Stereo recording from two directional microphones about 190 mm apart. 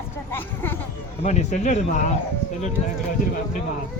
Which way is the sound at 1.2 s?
35° left (ahead or behind).